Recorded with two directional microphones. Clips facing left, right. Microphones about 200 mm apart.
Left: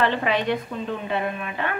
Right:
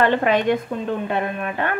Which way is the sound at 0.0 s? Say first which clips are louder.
Right 5 dB; 50° right (ahead or behind).